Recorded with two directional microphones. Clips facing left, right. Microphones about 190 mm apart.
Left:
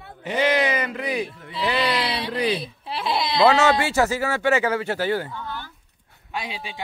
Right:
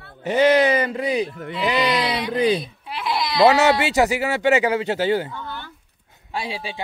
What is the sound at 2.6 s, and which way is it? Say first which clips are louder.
Speech: even; 30° left (ahead or behind).